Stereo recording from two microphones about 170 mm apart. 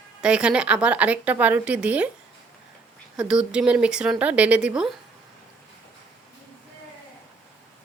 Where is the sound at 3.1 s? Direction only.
5° right (ahead or behind).